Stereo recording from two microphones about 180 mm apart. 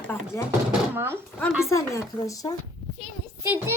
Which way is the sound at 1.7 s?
15° left (ahead or behind).